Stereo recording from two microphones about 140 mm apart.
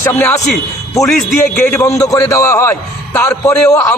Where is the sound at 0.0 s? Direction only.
15° left (ahead or behind).